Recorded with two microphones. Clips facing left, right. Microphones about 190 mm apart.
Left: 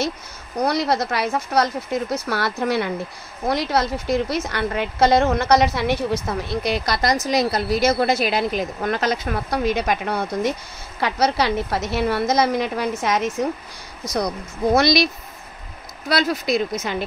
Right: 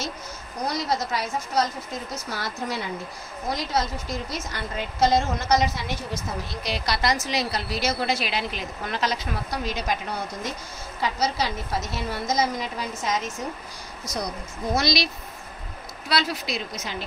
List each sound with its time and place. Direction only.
0.6 s a woman's voice: 65° left (ahead or behind)
14.8 s a woman's voice: 55° left (ahead or behind)
16.1 s a woman's voice: 50° left (ahead or behind)